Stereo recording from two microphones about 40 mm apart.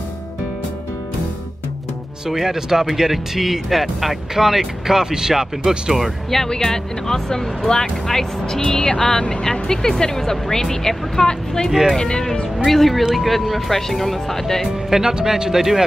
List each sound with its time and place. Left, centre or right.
2.2 s speech: centre
5.9 s speech: centre
6.4 s speech: centre
12.5 s speech: centre
14.9 s speech: centre